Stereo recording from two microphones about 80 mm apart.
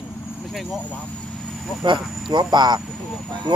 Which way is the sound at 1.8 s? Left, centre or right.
Right.